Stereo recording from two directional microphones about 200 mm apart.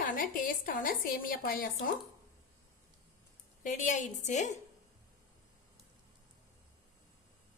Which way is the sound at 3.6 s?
40° left (ahead or behind).